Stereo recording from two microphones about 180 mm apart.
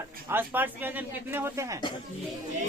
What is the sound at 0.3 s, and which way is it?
A woman's voice, 10° right (ahead or behind).